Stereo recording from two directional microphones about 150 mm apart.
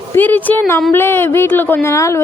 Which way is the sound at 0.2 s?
10° left (ahead or behind).